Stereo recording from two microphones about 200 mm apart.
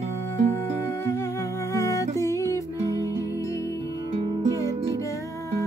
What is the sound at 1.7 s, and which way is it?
Music, 15° left (ahead or behind).